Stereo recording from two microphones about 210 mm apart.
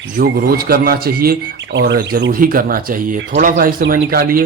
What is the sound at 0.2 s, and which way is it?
A man's voice, 45° right (ahead or behind).